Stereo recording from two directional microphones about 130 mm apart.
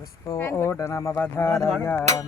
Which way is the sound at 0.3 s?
20° left (ahead or behind).